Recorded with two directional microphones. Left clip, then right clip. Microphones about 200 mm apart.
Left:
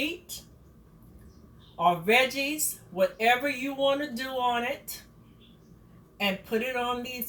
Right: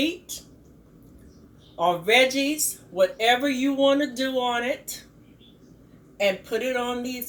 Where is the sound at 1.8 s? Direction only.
15° right (ahead or behind).